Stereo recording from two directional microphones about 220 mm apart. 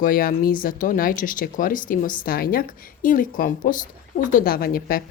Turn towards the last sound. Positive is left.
turn(degrees=45)  # may be behind; listen again after turning